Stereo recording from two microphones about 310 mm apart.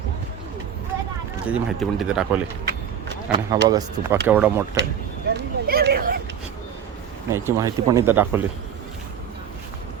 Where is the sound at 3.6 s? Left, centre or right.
Centre.